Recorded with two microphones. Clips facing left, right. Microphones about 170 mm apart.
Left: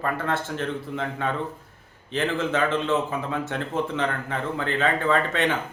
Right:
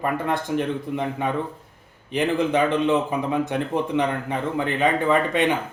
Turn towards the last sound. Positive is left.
turn(degrees=-15)  # may be behind; listen again after turning